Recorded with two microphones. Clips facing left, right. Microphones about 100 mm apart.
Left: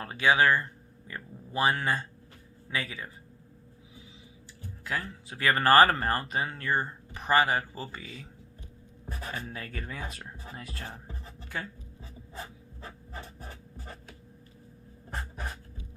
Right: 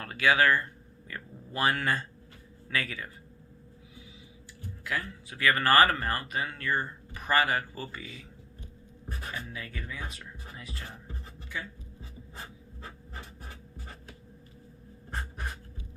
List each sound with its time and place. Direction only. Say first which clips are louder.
0.0 s speech: left 1 dB; 25° left (ahead or behind)
4.8 s speech: even; 25° left (ahead or behind)
9.3 s speech: left 2 dB; 40° left (ahead or behind)